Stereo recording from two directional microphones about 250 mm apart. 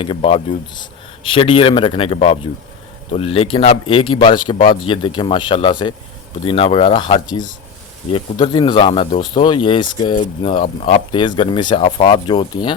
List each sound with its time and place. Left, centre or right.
0.0 s speech: left